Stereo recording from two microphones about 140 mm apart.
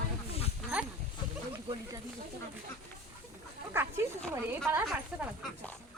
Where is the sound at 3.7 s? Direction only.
15° right (ahead or behind).